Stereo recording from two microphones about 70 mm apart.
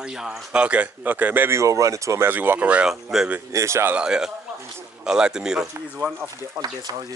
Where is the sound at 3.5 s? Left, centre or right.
Right.